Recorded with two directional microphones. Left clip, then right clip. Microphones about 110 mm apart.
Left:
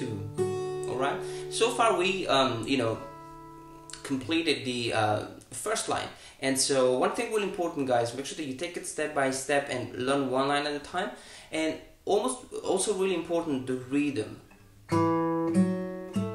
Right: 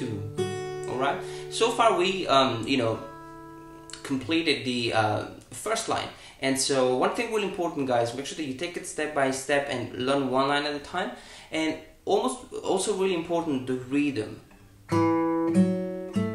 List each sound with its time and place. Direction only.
0.4 s music: 5° right (ahead or behind)
0.7 s speech: 15° right (ahead or behind)
4.0 s speech: 15° right (ahead or behind)
15.0 s music: 20° right (ahead or behind)
15.4 s music: 5° right (ahead or behind)
15.8 s music: 20° right (ahead or behind)